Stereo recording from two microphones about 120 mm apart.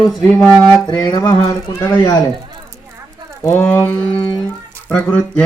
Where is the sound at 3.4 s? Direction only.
25° left (ahead or behind).